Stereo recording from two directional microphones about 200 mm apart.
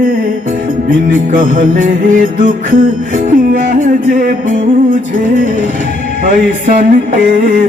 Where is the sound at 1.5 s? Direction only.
40° right (ahead or behind).